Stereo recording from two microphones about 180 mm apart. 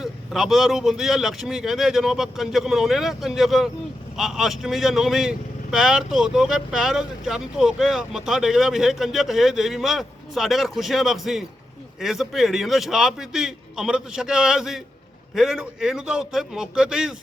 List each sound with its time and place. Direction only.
0.0 s speech: centre (ahead or behind)